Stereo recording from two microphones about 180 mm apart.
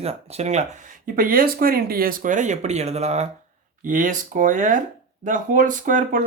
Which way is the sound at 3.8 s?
45° right (ahead or behind).